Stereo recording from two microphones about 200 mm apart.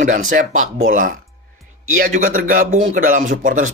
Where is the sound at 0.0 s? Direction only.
40° right (ahead or behind).